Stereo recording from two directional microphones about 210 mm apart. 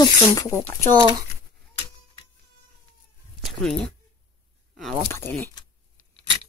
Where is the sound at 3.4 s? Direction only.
Centre (ahead or behind).